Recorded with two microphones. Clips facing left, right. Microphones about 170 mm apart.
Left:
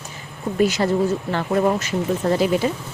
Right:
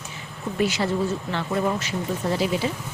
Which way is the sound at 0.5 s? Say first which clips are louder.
Left 5 dB; 45° left (ahead or behind).